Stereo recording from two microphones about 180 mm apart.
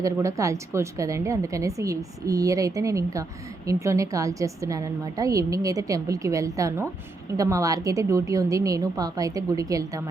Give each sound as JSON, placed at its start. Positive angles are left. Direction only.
{"t": 0.0, "sound": "a woman's voice", "side_deg": -15}